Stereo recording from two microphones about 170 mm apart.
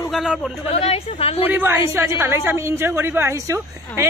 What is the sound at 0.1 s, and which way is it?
Speech, centre (ahead or behind).